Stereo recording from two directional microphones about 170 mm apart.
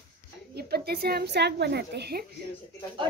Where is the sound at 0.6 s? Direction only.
65° right (ahead or behind).